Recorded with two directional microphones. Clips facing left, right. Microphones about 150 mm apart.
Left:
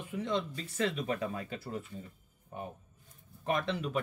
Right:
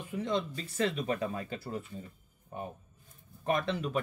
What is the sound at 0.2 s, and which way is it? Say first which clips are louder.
Speech: right 1 dB; 35° right (ahead or behind).